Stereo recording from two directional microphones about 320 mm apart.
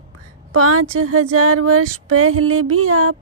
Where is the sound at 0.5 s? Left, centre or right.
Right.